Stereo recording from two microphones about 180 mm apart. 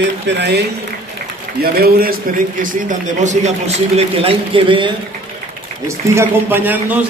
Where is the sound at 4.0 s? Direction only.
35° right (ahead or behind).